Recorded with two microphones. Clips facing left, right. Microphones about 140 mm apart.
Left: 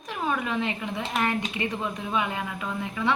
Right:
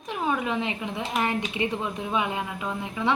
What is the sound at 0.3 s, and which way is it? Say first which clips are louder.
A woman's voice: right 1 dB; 20° right (ahead or behind).